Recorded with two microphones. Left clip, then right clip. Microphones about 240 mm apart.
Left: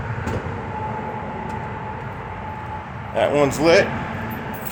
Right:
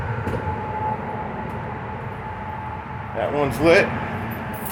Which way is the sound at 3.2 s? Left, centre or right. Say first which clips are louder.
Left 5 dB; left.